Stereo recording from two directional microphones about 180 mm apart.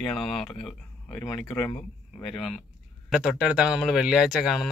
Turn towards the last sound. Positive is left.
turn(degrees=0)  # may be behind; listen again after turning